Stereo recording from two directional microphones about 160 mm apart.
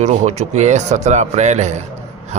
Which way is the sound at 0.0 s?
45° right (ahead or behind).